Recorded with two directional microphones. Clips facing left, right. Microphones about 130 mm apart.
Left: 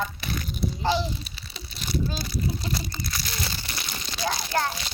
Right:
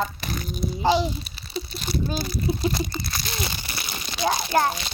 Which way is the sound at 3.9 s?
20° right (ahead or behind).